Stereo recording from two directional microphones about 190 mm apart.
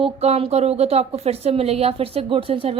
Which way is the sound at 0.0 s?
30° right (ahead or behind).